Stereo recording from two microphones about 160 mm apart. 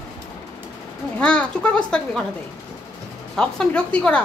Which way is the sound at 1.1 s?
10° left (ahead or behind).